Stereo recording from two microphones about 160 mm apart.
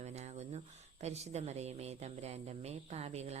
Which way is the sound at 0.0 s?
45° right (ahead or behind).